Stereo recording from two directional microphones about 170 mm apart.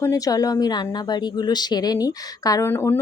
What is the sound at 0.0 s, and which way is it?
A woman's voice, 20° left (ahead or behind).